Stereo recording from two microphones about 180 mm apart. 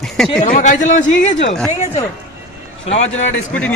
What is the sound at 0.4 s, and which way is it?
Speech, 45° left (ahead or behind).